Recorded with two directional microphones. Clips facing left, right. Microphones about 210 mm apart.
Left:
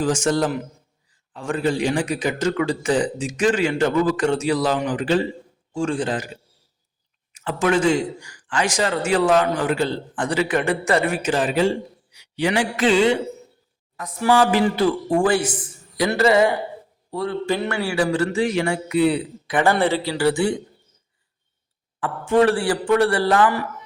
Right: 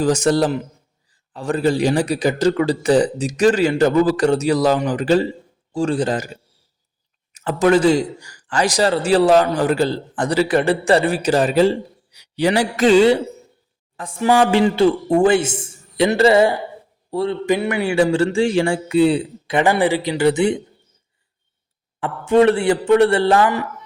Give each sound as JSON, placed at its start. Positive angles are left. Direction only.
{"t": 0.0, "sound": "a man's voice", "side_deg": -35}
{"t": 7.3, "sound": "a man's voice", "side_deg": -40}
{"t": 13.9, "sound": "a man's voice", "side_deg": -30}
{"t": 17.4, "sound": "speech", "side_deg": -15}
{"t": 19.6, "sound": "speech", "side_deg": -15}
{"t": 22.0, "sound": "speech", "side_deg": -25}